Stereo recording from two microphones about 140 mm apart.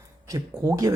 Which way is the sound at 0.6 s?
20° right (ahead or behind).